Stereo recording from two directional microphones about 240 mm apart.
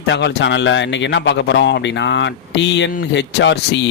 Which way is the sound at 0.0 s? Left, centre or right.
Left.